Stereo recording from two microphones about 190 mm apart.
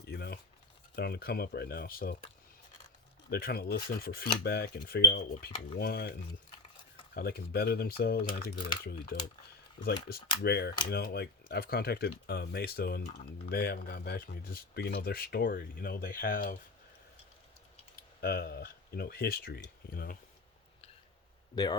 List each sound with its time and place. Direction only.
0.0 s a sound: 60° left (ahead or behind)
0.9 s speech: 55° left (ahead or behind)
3.2 s speech: 55° left (ahead or behind)
18.2 s speech: 55° left (ahead or behind)
21.5 s speech: 25° left (ahead or behind)